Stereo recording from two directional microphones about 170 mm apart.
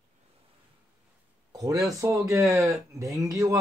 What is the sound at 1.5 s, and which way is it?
Speech, 20° right (ahead or behind).